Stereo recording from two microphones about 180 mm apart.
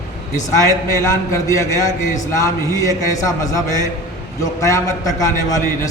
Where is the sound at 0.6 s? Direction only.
15° left (ahead or behind).